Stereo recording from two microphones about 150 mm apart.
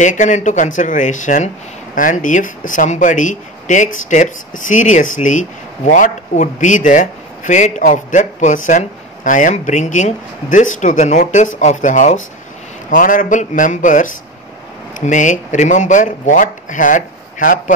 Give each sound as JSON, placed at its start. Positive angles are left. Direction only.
{"t": 0.0, "sound": "speech", "side_deg": 55}